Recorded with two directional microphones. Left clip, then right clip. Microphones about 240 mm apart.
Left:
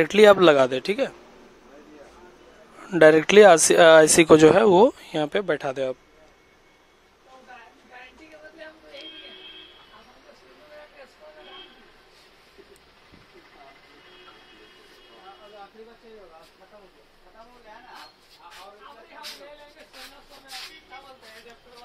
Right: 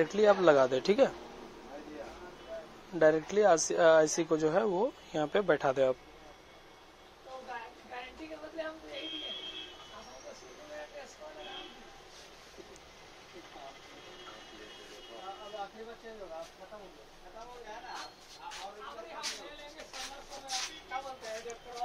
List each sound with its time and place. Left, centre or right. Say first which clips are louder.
0.0 s speech: left 11 dB; left
2.9 s speech: left 12 dB; left
5.1 s speech: left 5 dB; left